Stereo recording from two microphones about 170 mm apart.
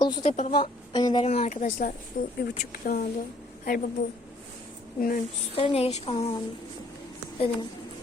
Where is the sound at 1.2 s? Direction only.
40° left (ahead or behind).